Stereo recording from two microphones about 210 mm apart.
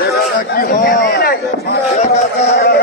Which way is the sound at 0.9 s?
55° left (ahead or behind).